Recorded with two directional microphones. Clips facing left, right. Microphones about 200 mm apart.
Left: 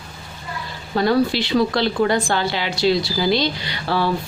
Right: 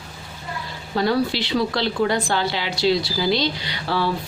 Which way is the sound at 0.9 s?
50° left (ahead or behind).